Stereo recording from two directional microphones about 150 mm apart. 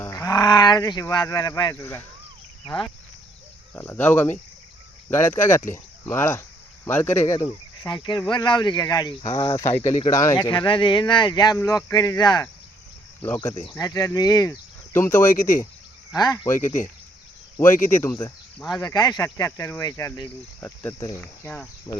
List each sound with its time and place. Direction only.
0.0 s speech: 20° left (ahead or behind)
2.6 s speech: 35° left (ahead or behind)
3.8 s speech: 15° left (ahead or behind)
13.2 s speech: 15° left (ahead or behind)
13.7 s speech: 25° left (ahead or behind)
17.9 s speech: 15° left (ahead or behind)
21.9 s speech: 25° left (ahead or behind)